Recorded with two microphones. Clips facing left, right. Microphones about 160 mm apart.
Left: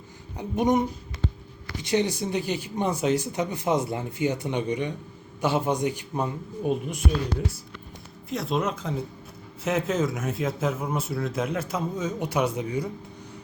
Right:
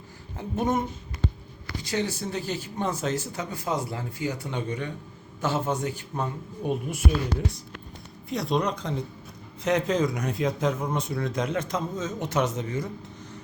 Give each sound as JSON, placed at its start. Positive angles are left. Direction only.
{"t": 0.3, "sound": "speech", "side_deg": 15}
{"t": 6.6, "sound": "a man's voice", "side_deg": 0}
{"t": 8.3, "sound": "a man's voice", "side_deg": 0}